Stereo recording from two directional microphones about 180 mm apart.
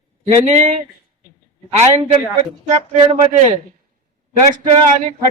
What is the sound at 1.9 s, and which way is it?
Speech, 40° right (ahead or behind).